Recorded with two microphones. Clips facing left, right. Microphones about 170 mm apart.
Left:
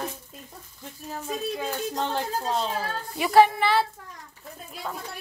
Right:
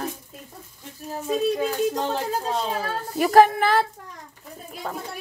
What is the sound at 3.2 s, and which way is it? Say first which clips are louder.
Speech: right 3 dB; 45° right (ahead or behind).